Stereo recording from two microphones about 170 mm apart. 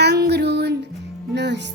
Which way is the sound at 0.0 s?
75° right (ahead or behind).